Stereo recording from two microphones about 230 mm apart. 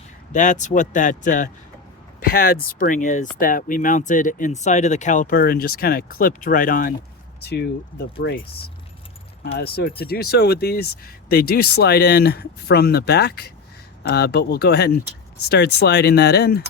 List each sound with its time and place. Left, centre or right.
0.3 s speech: left